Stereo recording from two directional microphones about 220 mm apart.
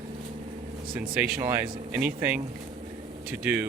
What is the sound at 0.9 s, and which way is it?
Speech, 5° right (ahead or behind).